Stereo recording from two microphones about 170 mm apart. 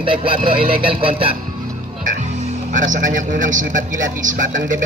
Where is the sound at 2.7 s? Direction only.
50° right (ahead or behind).